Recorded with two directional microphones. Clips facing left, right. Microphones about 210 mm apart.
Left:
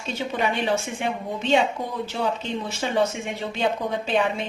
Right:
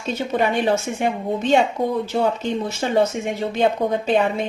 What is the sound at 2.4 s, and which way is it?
A woman's voice, 40° right (ahead or behind).